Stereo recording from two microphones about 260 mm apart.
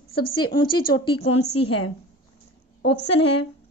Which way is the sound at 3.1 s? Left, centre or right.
Left.